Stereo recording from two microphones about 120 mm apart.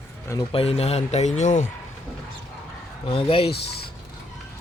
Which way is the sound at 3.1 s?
50° left (ahead or behind).